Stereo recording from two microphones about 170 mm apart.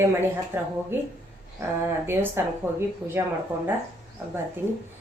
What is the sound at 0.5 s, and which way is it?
Speech, 15° right (ahead or behind).